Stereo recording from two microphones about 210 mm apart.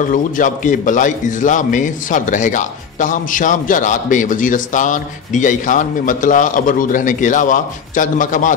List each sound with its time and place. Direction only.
0.0 s a man's voice: 40° left (ahead or behind)